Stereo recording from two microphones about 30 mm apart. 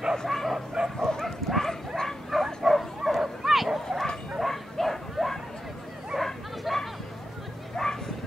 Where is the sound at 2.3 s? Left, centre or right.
Centre.